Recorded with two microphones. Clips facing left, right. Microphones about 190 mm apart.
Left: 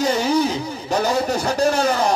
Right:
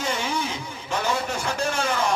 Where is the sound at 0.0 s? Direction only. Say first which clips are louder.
Left 9 dB; 40° left (ahead or behind).